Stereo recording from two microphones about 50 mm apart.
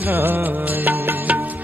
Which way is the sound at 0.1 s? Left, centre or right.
Right.